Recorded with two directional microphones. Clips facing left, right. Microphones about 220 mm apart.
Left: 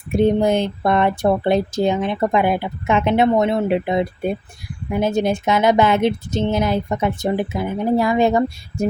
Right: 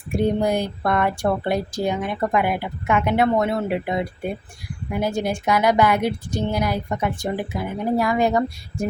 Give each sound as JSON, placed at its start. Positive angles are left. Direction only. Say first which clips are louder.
{"t": 0.1, "sound": "speech", "louder": "left 4 dB", "side_deg": 20}